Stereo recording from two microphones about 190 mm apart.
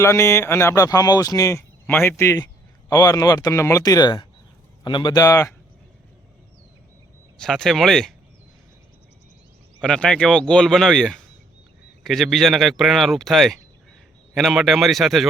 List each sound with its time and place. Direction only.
0.0 s speech: 15° left (ahead or behind)
7.3 s speech: 5° left (ahead or behind)
9.8 s speech: 5° left (ahead or behind)